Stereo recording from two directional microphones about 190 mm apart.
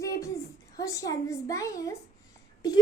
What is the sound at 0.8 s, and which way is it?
A child's voice, 20° left (ahead or behind).